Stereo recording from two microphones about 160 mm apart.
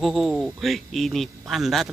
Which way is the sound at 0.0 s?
Centre (ahead or behind).